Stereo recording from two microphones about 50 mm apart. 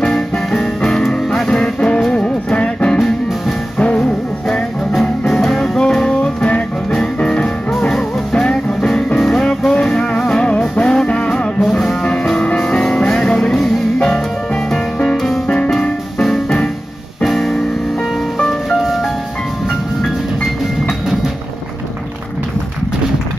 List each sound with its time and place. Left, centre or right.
0.0 s music: centre
5.2 s music: centre
17.2 s piano: centre
18.4 s music: centre